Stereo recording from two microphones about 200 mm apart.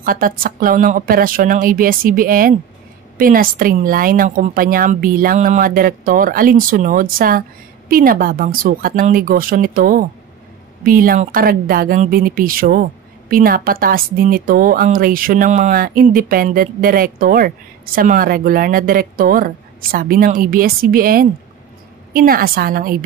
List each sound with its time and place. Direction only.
0.0 s speech: 45° right (ahead or behind)